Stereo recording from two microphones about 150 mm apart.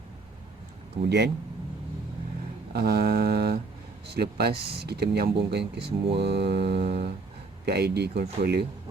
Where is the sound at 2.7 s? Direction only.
90° right.